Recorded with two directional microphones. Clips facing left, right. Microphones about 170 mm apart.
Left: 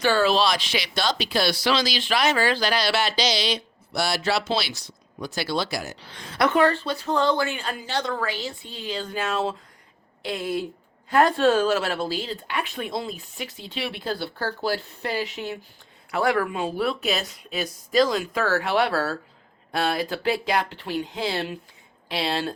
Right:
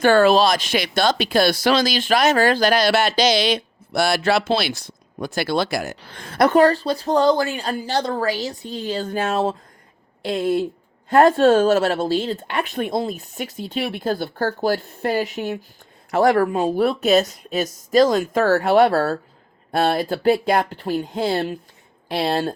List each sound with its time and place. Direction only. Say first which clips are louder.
0.0 s speech: right 6 dB; 50° right (ahead or behind)